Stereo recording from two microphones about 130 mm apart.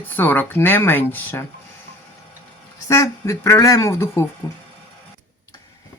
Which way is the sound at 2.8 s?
25° left (ahead or behind).